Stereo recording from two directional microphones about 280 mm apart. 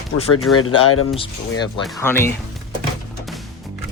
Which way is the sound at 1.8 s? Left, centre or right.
Centre.